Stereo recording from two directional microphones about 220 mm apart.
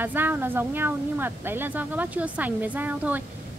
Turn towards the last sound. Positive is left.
turn(degrees=-10)  # may be behind; listen again after turning